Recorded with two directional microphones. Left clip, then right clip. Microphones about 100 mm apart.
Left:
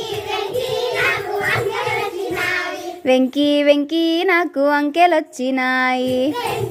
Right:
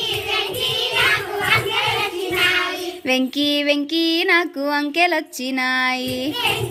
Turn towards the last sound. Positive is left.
turn(degrees=55)  # may be behind; listen again after turning